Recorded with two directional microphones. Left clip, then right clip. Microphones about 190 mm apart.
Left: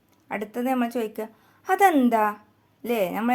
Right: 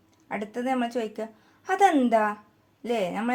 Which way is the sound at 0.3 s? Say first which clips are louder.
Left 2 dB; 30° left (ahead or behind).